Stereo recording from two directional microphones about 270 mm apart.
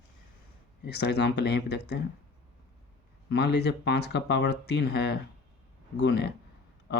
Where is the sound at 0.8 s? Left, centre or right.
Left.